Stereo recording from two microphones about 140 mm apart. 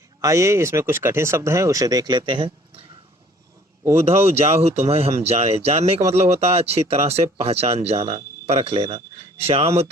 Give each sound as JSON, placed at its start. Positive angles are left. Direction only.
{"t": 0.2, "sound": "speech", "side_deg": -20}
{"t": 3.9, "sound": "speech", "side_deg": -45}